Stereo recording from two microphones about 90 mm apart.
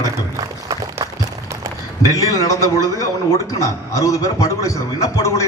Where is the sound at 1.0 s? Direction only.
40° right (ahead or behind).